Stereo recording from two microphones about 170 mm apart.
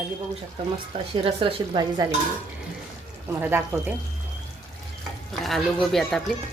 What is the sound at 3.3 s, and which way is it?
Speech, 10° right (ahead or behind).